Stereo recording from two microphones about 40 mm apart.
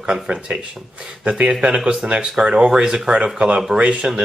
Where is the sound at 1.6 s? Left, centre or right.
Right.